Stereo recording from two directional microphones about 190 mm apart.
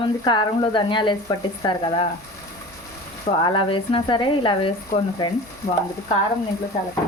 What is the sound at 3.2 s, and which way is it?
Speech, 30° left (ahead or behind).